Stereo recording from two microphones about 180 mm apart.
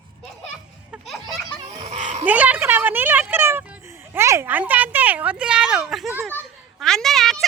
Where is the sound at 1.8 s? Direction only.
40° right (ahead or behind).